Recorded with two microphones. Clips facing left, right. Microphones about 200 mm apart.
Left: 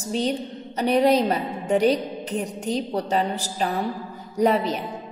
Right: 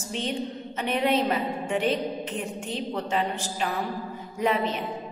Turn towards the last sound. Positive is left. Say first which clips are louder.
# left 5 dB
turn(degrees=40)  # may be behind; listen again after turning